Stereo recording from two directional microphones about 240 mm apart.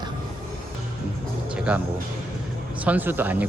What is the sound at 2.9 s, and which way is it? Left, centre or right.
Speech, centre.